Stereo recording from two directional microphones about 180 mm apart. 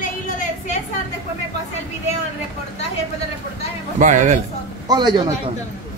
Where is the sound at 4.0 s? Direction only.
40° right (ahead or behind).